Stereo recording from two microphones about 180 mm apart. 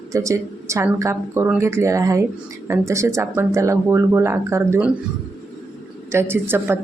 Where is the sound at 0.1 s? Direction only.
15° right (ahead or behind).